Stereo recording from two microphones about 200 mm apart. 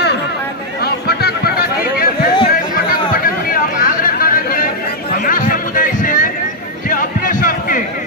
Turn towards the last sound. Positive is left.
turn(degrees=45)  # may be behind; listen again after turning